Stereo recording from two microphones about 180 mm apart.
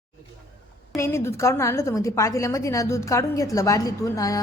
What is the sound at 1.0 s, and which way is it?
A woman's voice, 15° left (ahead or behind).